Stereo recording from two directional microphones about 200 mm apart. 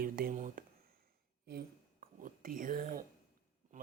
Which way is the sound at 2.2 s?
40° right (ahead or behind).